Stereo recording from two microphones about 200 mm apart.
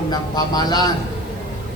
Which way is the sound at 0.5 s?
20° left (ahead or behind).